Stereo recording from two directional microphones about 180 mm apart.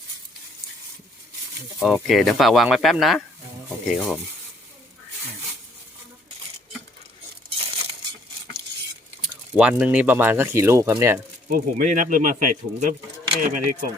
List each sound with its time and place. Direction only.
1.8 s speech: centre (ahead or behind)
9.6 s speech: 5° right (ahead or behind)
11.4 s speech: 50° right (ahead or behind)